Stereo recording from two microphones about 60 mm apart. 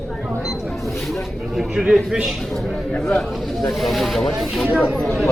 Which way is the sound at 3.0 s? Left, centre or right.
Centre.